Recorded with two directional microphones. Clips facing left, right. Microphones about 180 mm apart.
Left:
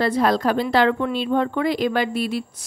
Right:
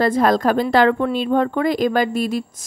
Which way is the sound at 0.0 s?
50° right (ahead or behind).